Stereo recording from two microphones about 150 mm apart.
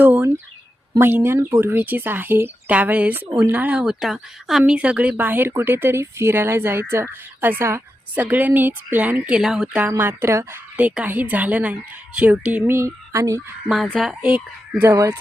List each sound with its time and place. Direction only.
0.0 s a sound: 15° right (ahead or behind)
0.9 s speech: 15° right (ahead or behind)
13.7 s speech: centre (ahead or behind)
14.8 s speech: 20° right (ahead or behind)